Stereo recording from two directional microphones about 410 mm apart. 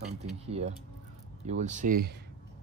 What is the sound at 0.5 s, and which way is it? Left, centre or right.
Speech, centre.